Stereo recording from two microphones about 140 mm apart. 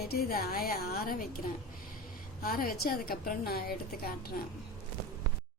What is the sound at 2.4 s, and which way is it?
A woman's voice, 90° left.